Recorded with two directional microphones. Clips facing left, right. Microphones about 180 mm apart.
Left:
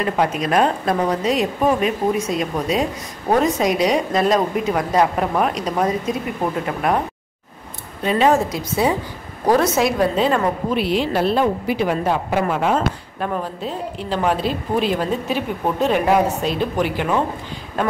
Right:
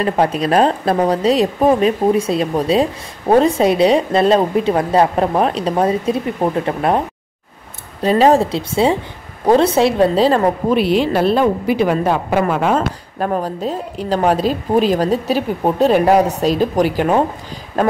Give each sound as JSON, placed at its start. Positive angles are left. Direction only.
{"t": 0.0, "sound": "speech", "side_deg": -35}
{"t": 8.0, "sound": "speech", "side_deg": -35}
{"t": 11.1, "sound": "a woman's voice", "side_deg": -75}
{"t": 13.2, "sound": "speech", "side_deg": -40}